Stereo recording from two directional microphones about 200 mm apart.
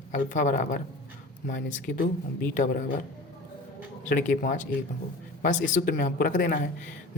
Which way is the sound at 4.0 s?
40° left (ahead or behind).